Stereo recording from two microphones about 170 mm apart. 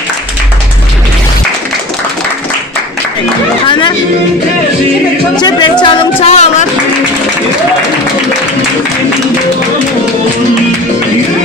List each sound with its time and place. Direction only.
3.6 s a sound: 25° left (ahead or behind)
5.4 s speech: 25° left (ahead or behind)
6.2 s music: 40° left (ahead or behind)